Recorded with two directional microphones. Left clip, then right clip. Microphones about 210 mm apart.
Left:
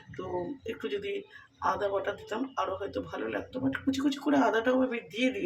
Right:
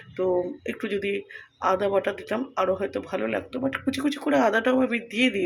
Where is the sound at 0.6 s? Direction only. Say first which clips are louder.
Right 6 dB; 35° right (ahead or behind).